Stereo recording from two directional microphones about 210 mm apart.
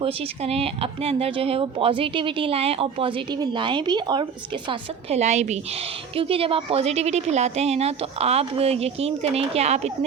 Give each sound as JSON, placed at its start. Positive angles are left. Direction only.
{"t": 0.0, "sound": "speech", "side_deg": -30}
{"t": 4.7, "sound": "speech", "side_deg": -30}